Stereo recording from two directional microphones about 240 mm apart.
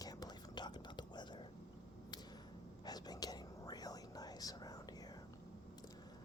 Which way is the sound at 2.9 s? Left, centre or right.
Centre.